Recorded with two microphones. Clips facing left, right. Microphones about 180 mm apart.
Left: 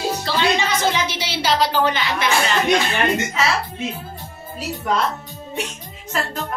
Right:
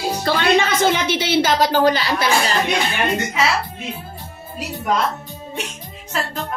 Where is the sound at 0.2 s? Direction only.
50° right (ahead or behind); by 2.3 s 35° right (ahead or behind).